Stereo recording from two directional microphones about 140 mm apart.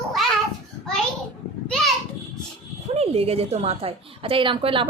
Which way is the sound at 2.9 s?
45° right (ahead or behind).